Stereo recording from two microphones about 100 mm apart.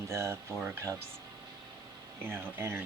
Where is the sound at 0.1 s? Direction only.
25° right (ahead or behind).